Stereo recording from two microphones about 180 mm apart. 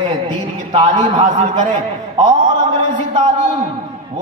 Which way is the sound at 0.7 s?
35° right (ahead or behind).